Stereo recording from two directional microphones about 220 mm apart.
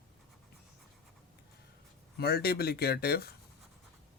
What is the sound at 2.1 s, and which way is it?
Speech, 45° left (ahead or behind).